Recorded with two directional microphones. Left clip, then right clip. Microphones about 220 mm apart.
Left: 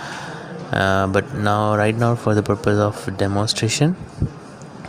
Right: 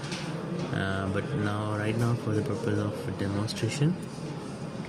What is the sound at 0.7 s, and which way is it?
Speech, 50° left (ahead or behind).